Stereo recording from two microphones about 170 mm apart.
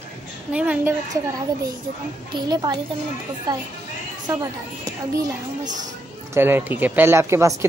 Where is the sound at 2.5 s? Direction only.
25° right (ahead or behind).